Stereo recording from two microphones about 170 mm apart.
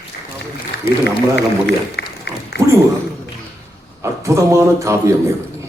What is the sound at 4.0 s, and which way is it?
Speech, 15° right (ahead or behind).